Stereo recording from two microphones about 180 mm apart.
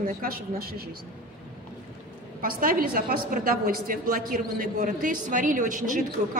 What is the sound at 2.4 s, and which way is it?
A woman's voice, 55° right (ahead or behind).